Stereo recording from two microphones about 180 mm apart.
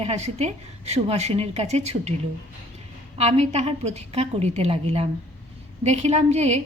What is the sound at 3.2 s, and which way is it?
A woman's voice, 35° right (ahead or behind).